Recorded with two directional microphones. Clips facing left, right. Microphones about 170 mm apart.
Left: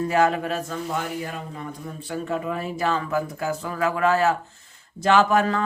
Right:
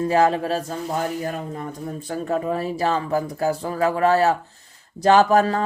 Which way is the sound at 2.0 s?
40° right (ahead or behind).